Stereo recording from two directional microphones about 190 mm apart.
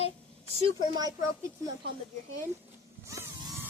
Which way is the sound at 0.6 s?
20° right (ahead or behind).